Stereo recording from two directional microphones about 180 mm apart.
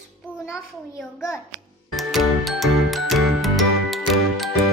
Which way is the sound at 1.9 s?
Centre (ahead or behind).